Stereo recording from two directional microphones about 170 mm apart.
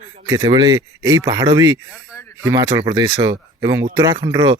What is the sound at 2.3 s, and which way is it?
Speech, 20° right (ahead or behind).